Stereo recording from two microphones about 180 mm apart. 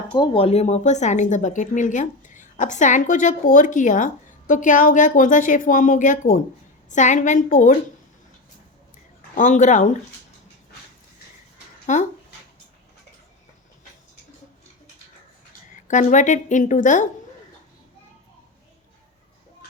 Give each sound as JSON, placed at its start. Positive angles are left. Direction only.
{"t": 0.1, "sound": "speech", "side_deg": 25}
{"t": 9.3, "sound": "speech", "side_deg": 45}
{"t": 11.9, "sound": "speech", "side_deg": 40}
{"t": 15.9, "sound": "speech", "side_deg": 45}